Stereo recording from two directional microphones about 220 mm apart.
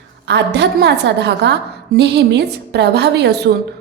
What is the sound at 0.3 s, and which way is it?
A woman's voice, 50° right (ahead or behind).